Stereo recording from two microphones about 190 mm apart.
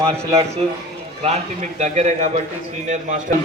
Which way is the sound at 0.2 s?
35° right (ahead or behind).